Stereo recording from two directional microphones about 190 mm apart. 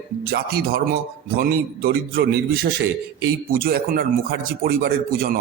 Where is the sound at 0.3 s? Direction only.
55° right (ahead or behind).